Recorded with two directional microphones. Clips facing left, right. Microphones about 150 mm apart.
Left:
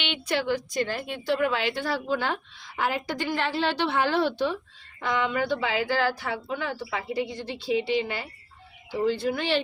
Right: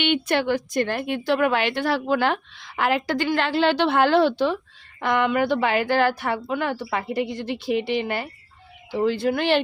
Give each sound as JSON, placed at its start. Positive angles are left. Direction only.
{"t": 0.0, "sound": "a woman's voice", "side_deg": -55}
{"t": 4.9, "sound": "a woman's voice", "side_deg": -65}